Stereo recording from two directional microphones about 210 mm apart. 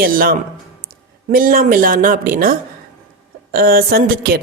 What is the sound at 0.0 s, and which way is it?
A woman's voice, 45° right (ahead or behind).